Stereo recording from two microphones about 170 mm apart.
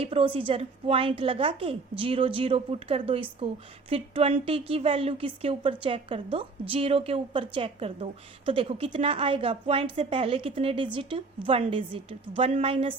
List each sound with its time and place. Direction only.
0.0 s a woman's voice: 35° right (ahead or behind)